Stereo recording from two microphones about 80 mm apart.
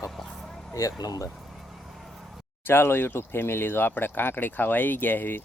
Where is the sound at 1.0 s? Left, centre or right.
Left.